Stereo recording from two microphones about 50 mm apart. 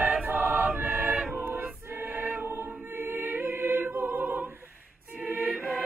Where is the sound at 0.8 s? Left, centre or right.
Right.